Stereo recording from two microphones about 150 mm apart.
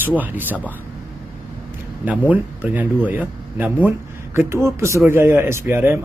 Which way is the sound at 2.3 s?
10° right (ahead or behind).